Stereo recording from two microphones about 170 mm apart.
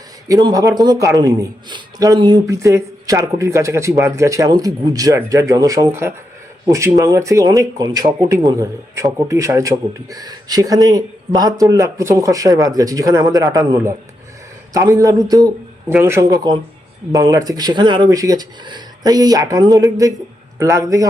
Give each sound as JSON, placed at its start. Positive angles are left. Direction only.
{"t": 0.3, "sound": "a man's voice", "side_deg": -20}
{"t": 15.9, "sound": "a man's voice", "side_deg": -10}